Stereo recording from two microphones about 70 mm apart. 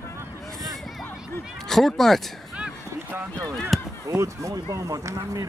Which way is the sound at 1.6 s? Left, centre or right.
Centre.